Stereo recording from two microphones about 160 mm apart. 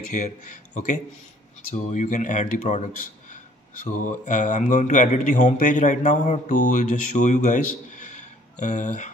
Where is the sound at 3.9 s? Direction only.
50° left (ahead or behind).